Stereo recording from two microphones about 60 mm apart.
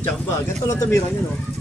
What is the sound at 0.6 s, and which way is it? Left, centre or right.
Speech, left.